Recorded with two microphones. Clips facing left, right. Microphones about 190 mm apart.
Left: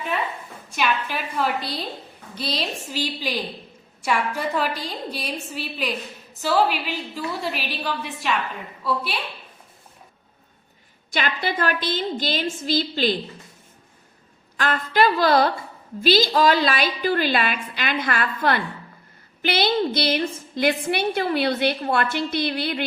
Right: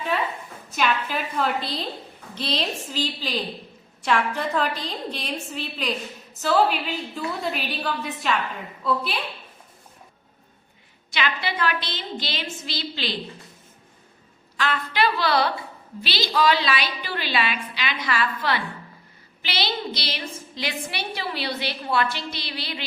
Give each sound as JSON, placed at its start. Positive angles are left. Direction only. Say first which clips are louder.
{"t": 0.8, "sound": "a woman's voice", "louder": "even", "side_deg": 5}
{"t": 11.1, "sound": "a woman's voice", "louder": "left 2 dB", "side_deg": 50}
{"t": 14.5, "sound": "a woman's voice", "louder": "left 3 dB", "side_deg": 45}